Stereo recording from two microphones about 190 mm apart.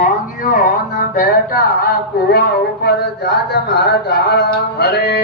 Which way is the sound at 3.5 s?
60° left (ahead or behind).